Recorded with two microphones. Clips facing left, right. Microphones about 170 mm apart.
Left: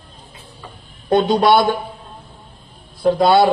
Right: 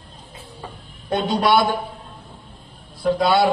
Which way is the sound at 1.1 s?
30° left (ahead or behind).